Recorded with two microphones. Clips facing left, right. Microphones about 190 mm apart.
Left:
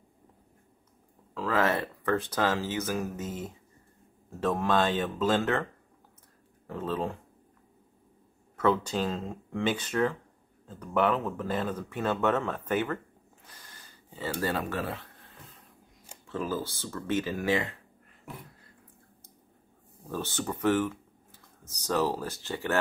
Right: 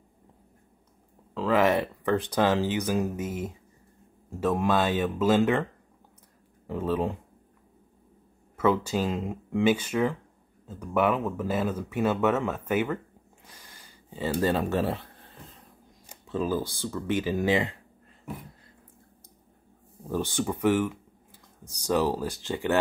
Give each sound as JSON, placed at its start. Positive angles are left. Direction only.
{"t": 1.3, "sound": "speech", "side_deg": -15}
{"t": 6.7, "sound": "speech", "side_deg": -15}
{"t": 8.5, "sound": "speech", "side_deg": -10}
{"t": 13.5, "sound": "a sound", "side_deg": -10}
{"t": 16.3, "sound": "speech", "side_deg": -15}
{"t": 20.1, "sound": "speech", "side_deg": -15}